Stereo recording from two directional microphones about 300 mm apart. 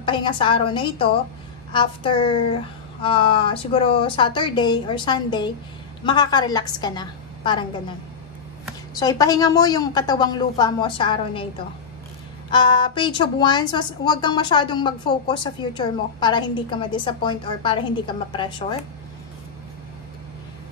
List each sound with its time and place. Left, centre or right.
0.0 s a woman's voice: centre
9.0 s a woman's voice: centre
12.4 s a woman's voice: centre